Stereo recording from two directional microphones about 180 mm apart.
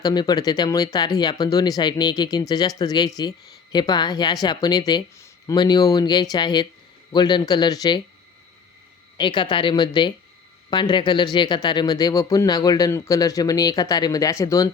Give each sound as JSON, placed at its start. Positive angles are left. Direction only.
{"t": 0.0, "sound": "speech", "side_deg": 20}
{"t": 9.1, "sound": "speech", "side_deg": 25}